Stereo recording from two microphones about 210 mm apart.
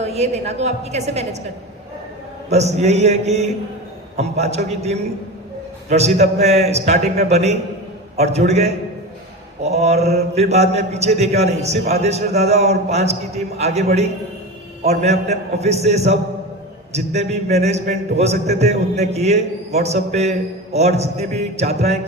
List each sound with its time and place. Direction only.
0.0 s a man's voice: 30° right (ahead or behind)
2.5 s a man's voice: 30° right (ahead or behind)
14.8 s a man's voice: 30° right (ahead or behind)